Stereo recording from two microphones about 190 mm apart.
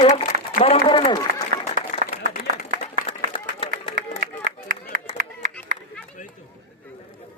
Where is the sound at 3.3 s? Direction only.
30° left (ahead or behind).